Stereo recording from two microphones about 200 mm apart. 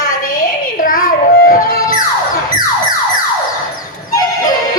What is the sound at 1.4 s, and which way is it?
Music, 45° left (ahead or behind).